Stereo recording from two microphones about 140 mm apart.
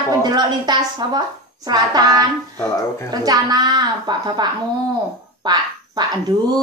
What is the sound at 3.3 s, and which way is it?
A woman's voice, 30° right (ahead or behind).